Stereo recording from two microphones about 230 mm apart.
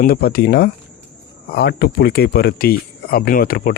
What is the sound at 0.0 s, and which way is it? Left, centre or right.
Speech, left.